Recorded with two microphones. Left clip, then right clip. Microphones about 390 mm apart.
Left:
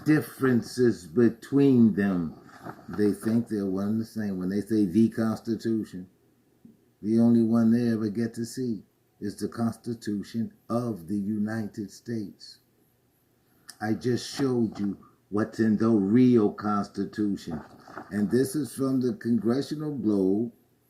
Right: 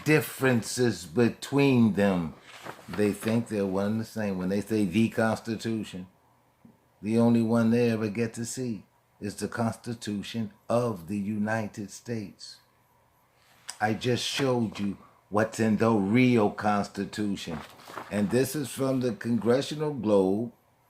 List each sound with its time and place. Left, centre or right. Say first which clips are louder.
0.0 s speech: right 1 dB; centre
3.5 s speech: right 1 dB; centre
7.0 s speech: left 1 dB; centre
13.7 s speech: right 2 dB; centre